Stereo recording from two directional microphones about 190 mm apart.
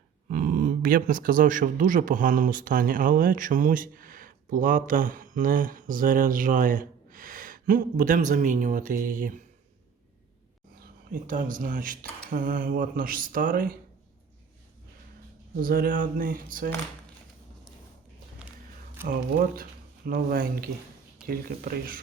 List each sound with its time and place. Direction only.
0.3 s speech: 45° right (ahead or behind)
10.8 s speech: 45° right (ahead or behind)
15.6 s speech: 50° right (ahead or behind)
19.0 s speech: 10° right (ahead or behind)
20.1 s speech: 50° right (ahead or behind)